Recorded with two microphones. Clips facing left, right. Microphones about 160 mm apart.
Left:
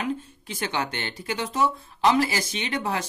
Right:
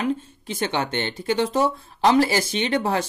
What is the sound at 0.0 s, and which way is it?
A man's voice, 25° right (ahead or behind).